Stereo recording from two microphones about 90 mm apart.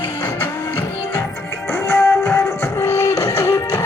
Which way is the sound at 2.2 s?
35° left (ahead or behind).